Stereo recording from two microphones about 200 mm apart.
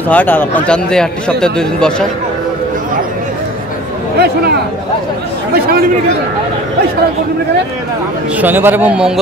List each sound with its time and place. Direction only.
0.1 s a man's voice: 10° left (ahead or behind)
4.2 s speech: 50° right (ahead or behind)
8.4 s a man's voice: 10° right (ahead or behind)